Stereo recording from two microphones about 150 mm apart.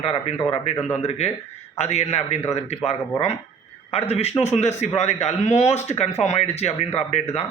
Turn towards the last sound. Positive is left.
turn(degrees=45)  # may be behind; listen again after turning